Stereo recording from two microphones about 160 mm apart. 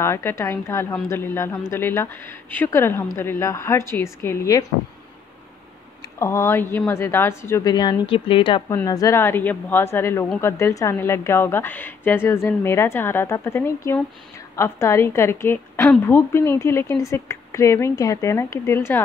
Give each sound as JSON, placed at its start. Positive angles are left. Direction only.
{"t": 0.0, "sound": "a woman's voice", "side_deg": 15}
{"t": 6.1, "sound": "a woman's voice", "side_deg": 15}
{"t": 7.7, "sound": "a woman's voice", "side_deg": 30}
{"t": 8.6, "sound": "a woman's voice", "side_deg": 20}